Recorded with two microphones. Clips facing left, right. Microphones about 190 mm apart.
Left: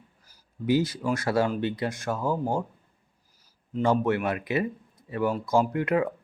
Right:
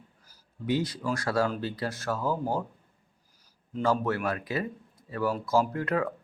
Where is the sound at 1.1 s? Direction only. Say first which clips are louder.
Left 3 dB; 25° left (ahead or behind).